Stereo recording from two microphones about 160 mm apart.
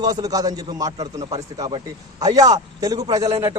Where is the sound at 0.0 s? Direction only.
25° right (ahead or behind).